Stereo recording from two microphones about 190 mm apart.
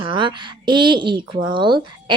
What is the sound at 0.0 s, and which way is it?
Speech, 25° right (ahead or behind).